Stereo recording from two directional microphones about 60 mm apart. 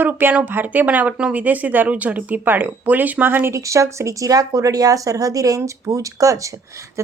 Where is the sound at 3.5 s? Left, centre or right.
Right.